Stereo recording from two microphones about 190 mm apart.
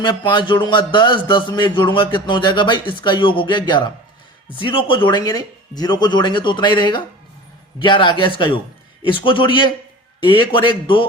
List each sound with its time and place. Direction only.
0.0 s a man's voice: 25° left (ahead or behind)